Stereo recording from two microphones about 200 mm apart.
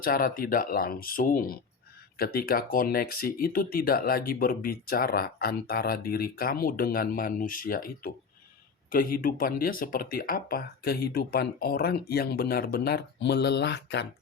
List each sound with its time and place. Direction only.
0.0 s speech: 45° left (ahead or behind)